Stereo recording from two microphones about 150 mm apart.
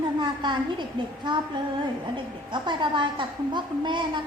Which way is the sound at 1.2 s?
30° right (ahead or behind).